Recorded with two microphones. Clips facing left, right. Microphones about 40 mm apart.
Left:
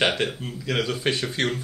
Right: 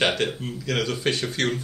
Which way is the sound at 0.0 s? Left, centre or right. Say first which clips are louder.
Even; centre.